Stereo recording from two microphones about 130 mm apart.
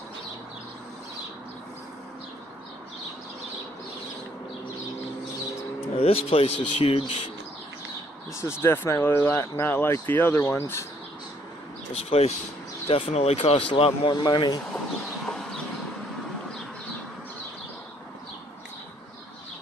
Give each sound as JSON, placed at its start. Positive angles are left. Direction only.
{"t": 5.9, "sound": "speech", "side_deg": 50}
{"t": 8.4, "sound": "speech", "side_deg": 20}
{"t": 11.9, "sound": "speech", "side_deg": 50}
{"t": 14.1, "sound": "speech", "side_deg": 35}
{"t": 15.2, "sound": "a sound", "side_deg": 5}